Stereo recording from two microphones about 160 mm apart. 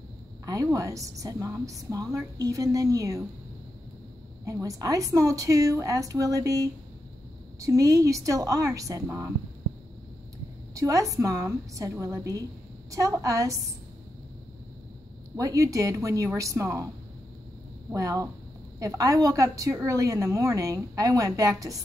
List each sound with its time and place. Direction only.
0.5 s a woman's voice: 20° right (ahead or behind)
4.5 s a woman's voice: 20° right (ahead or behind)
10.7 s a woman's voice: 20° right (ahead or behind)
15.3 s a woman's voice: 20° right (ahead or behind)
17.9 s a woman's voice: 20° right (ahead or behind)